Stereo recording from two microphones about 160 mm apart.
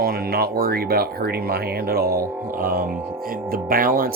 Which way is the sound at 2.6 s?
65° right (ahead or behind).